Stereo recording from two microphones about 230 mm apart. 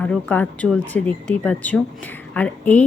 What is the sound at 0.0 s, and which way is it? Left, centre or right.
Speech, centre.